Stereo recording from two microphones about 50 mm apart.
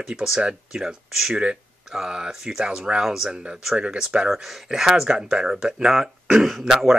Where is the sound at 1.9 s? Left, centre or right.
Centre.